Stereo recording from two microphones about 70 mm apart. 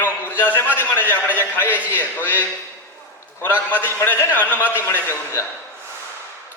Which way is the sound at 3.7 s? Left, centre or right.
Left.